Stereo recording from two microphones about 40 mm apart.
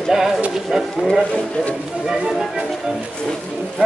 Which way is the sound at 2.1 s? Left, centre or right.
Centre.